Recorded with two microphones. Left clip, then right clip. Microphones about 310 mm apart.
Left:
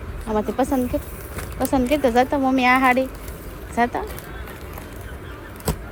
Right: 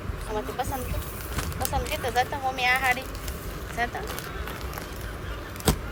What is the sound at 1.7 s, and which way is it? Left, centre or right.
Speech, centre.